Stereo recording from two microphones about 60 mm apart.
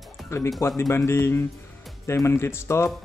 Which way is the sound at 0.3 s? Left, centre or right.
Left.